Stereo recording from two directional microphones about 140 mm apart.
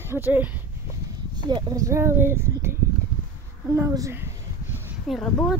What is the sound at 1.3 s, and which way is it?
Speech, 30° right (ahead or behind).